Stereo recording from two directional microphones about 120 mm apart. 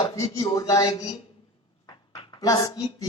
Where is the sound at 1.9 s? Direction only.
30° left (ahead or behind).